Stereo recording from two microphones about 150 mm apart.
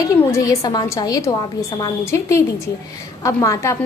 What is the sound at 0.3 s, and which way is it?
A child's voice, 20° left (ahead or behind).